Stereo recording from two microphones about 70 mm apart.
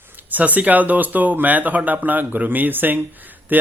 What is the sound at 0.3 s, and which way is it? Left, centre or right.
Speech, right.